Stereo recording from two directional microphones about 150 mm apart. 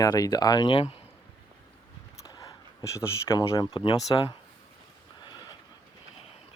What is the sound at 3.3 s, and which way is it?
Speech, 30° left (ahead or behind).